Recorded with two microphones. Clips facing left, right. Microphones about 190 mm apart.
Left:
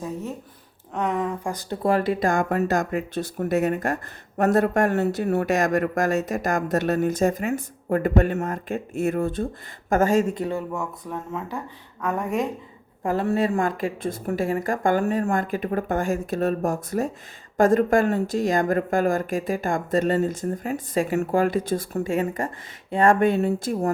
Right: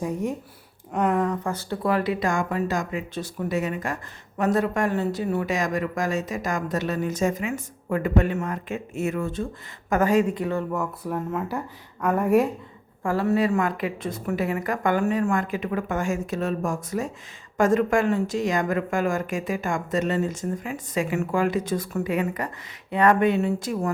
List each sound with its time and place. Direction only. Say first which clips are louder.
0.0 s speech: right 4 dB; 10° right (ahead or behind)
1.5 s speech: left 1 dB; 20° left (ahead or behind)
1.9 s speech: left 3 dB; 45° left (ahead or behind)
3.5 s speech: left 5 dB; 60° left (ahead or behind)
10.7 s speech: right 3 dB; 5° right (ahead or behind)
13.0 s speech: even; 20° left (ahead or behind)
13.6 s speech: left 1 dB; 45° left (ahead or behind)
15.3 s speech: left 1 dB; 50° left (ahead or behind)
17.6 s speech: left 2 dB; 35° left (ahead or behind)
17.9 s speech: left 2 dB; 45° left (ahead or behind)
18.6 s speech: left 3 dB; 40° left (ahead or behind)
19.7 s speech: left 4 dB; 50° left (ahead or behind)
21.0 s speech: left 2 dB; 40° left (ahead or behind)
23.2 s speech: left 1 dB; 50° left (ahead or behind)